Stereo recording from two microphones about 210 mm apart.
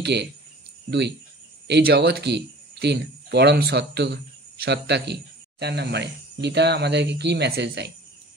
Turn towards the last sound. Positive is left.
turn(degrees=-50)  # may be behind; listen again after turning